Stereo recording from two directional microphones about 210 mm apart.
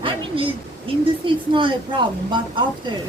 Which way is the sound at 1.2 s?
25° right (ahead or behind).